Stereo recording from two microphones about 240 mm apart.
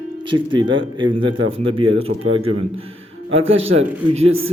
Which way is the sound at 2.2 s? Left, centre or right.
Right.